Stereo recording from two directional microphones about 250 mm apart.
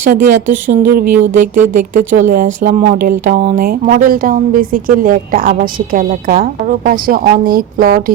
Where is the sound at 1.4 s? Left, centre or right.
Right.